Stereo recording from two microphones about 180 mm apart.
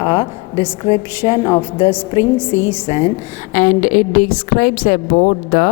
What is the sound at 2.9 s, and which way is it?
A woman's voice, 40° left (ahead or behind).